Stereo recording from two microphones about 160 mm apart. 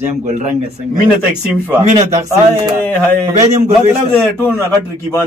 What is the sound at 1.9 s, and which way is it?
Speech, 45° right (ahead or behind).